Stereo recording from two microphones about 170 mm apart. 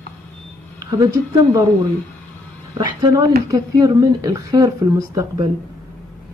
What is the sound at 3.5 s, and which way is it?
A woman's voice, 20° right (ahead or behind).